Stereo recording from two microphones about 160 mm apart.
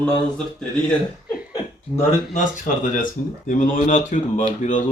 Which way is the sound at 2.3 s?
55° left (ahead or behind).